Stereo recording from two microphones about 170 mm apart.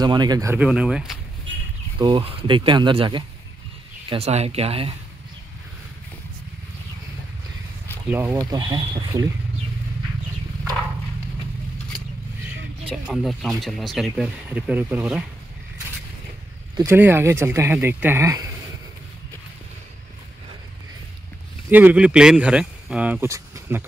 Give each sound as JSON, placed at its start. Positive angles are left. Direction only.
{"t": 0.0, "sound": "speech", "side_deg": -25}
{"t": 0.6, "sound": "speech", "side_deg": -5}
{"t": 2.0, "sound": "speech", "side_deg": -30}
{"t": 8.1, "sound": "speech", "side_deg": -10}
{"t": 8.4, "sound": "speech", "side_deg": -20}
{"t": 12.9, "sound": "speech", "side_deg": 0}
{"t": 16.7, "sound": "speech", "side_deg": -15}
{"t": 21.6, "sound": "speech", "side_deg": -10}